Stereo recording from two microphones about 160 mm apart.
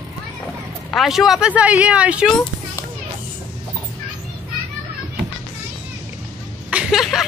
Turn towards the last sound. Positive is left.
turn(degrees=0)  # may be behind; listen again after turning